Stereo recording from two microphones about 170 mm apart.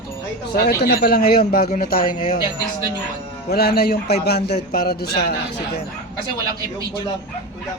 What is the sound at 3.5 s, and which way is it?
Speech, 70° left (ahead or behind).